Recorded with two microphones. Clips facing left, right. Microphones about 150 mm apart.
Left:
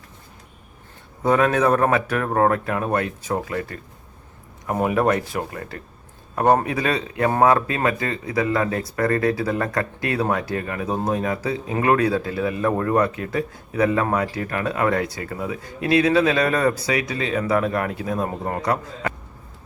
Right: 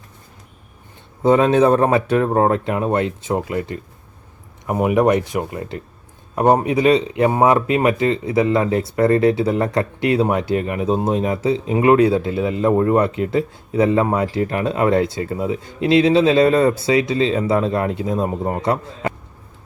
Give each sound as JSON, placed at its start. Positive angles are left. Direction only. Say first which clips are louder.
{"t": 1.2, "sound": "speech", "louder": "right 5 dB", "side_deg": -25}